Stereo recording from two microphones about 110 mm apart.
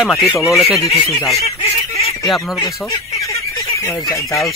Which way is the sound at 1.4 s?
65° left (ahead or behind).